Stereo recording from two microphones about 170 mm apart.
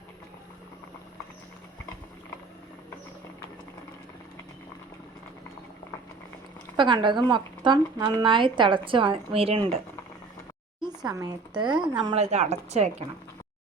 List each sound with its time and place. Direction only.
6.7 s speech: 30° right (ahead or behind)
11.0 s speech: 20° right (ahead or behind)
12.1 s speech: 40° right (ahead or behind)